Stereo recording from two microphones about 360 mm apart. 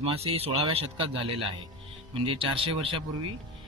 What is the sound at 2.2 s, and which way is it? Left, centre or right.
Speech, centre.